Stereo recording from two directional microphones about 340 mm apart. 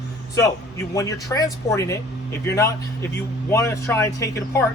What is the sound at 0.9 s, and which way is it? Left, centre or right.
Speech, centre.